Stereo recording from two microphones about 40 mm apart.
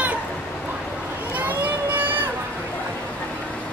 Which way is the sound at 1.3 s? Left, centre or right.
Right.